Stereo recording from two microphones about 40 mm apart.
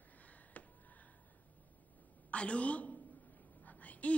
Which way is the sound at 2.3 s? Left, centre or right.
Left.